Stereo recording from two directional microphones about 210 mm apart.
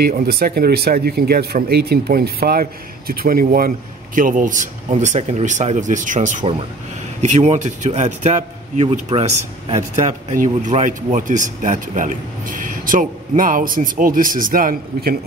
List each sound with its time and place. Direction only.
0.0 s a man's voice: 45° right (ahead or behind)